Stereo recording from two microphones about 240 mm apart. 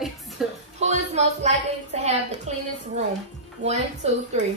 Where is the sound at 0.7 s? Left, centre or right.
Right.